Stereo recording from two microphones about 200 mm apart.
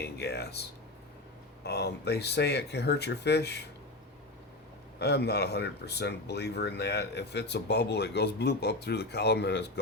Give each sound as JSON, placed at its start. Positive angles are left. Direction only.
{"t": 0.0, "sound": "speech", "side_deg": 55}
{"t": 4.9, "sound": "speech", "side_deg": 55}